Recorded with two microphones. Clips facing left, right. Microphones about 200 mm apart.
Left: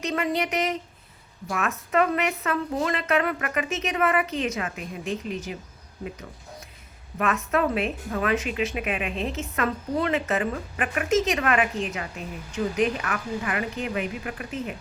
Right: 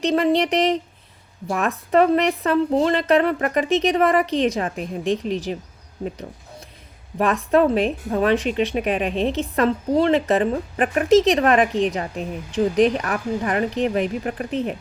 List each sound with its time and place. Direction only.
0.0 s speech: 30° right (ahead or behind)
7.2 s speech: 35° right (ahead or behind)